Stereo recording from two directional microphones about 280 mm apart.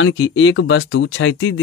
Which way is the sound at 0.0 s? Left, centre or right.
Left.